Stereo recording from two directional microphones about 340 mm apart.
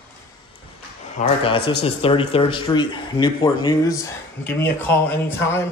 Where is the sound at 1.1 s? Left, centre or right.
Centre.